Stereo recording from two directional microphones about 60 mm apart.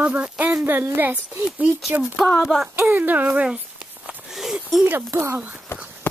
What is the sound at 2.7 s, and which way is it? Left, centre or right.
Speech, right.